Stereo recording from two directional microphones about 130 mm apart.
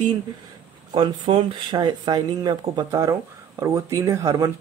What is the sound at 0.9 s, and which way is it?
Speech, 40° right (ahead or behind).